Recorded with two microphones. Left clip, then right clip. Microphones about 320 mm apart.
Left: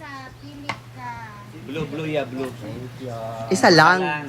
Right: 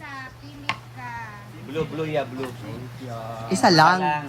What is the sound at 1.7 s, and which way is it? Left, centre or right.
Speech, right.